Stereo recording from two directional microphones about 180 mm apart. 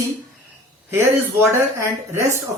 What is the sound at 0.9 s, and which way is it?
Speech, 15° right (ahead or behind).